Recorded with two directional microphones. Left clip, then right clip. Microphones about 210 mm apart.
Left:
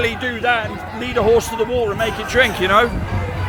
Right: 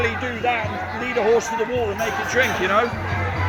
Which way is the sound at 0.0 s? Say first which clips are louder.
Left 3 dB; 35° left (ahead or behind).